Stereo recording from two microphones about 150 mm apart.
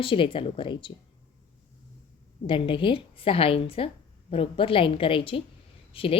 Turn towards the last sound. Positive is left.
turn(degrees=40)  # may be behind; listen again after turning